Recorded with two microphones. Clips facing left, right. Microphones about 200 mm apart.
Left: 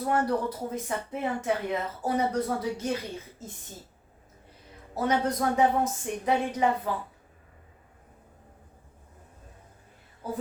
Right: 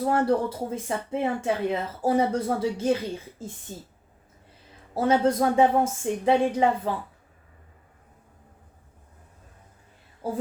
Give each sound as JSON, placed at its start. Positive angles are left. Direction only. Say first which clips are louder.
{"t": 0.0, "sound": "speech", "louder": "right 4 dB", "side_deg": -30}
{"t": 4.9, "sound": "speech", "louder": "right 5 dB", "side_deg": -30}
{"t": 10.2, "sound": "speech", "louder": "right 4 dB", "side_deg": -30}